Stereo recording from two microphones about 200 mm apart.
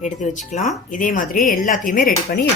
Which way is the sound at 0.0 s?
35° left (ahead or behind).